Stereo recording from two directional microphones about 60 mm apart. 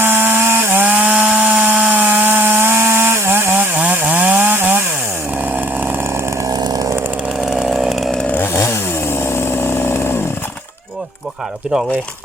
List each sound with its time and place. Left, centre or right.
0.0 s wood: right
4.0 s chainsaw: right
7.4 s chainsaw: centre
8.5 s chainsaw: left